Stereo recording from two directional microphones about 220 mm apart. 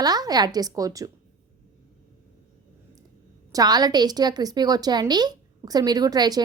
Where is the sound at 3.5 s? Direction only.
20° right (ahead or behind).